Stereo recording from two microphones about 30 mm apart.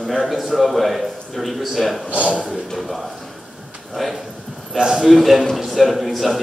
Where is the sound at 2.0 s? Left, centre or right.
Right.